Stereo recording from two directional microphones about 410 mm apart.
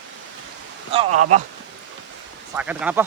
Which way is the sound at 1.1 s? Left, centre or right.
Right.